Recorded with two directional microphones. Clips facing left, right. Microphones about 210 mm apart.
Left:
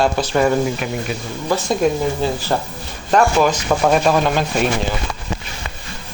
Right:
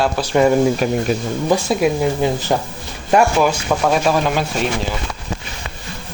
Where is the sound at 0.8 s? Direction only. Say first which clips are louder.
Right 6 dB; 40° right (ahead or behind).